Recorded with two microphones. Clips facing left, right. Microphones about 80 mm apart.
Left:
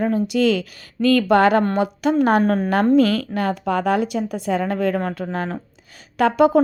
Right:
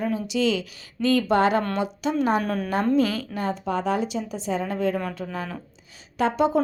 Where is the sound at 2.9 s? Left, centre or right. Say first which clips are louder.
Left 6 dB; left.